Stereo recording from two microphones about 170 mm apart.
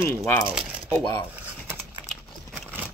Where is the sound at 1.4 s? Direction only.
10° right (ahead or behind).